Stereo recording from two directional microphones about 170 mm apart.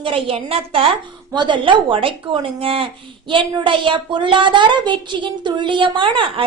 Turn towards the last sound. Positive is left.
turn(degrees=-30)  # may be behind; listen again after turning